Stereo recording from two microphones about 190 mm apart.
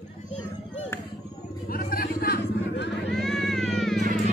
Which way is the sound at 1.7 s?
50° left (ahead or behind).